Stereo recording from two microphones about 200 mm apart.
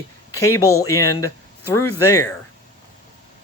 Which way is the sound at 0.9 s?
15° left (ahead or behind).